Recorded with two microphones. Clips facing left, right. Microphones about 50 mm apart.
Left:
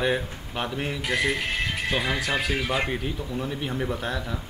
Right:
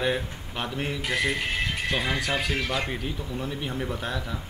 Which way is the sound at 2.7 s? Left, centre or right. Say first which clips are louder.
Left 3 dB; centre.